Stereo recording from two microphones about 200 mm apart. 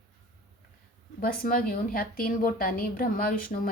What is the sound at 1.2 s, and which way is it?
A woman's voice, 45° left (ahead or behind).